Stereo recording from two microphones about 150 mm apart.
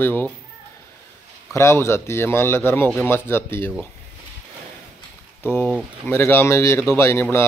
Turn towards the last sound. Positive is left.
turn(degrees=15)  # may be behind; listen again after turning